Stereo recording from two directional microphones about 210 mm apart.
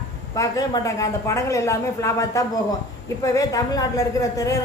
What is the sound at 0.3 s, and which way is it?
A woman's voice, 15° left (ahead or behind).